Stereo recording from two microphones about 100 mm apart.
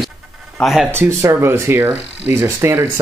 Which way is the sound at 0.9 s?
25° right (ahead or behind).